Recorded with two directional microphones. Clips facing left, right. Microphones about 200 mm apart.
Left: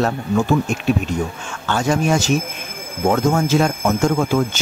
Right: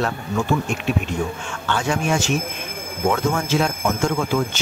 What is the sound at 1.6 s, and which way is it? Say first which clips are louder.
Speech: left 4 dB; 40° left (ahead or behind).